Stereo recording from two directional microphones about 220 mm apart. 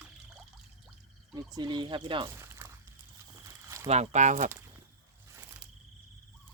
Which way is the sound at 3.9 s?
30° right (ahead or behind).